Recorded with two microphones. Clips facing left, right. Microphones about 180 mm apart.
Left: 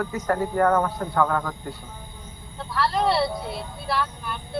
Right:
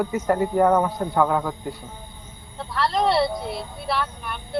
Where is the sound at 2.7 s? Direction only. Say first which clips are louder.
Right 2 dB; 15° right (ahead or behind).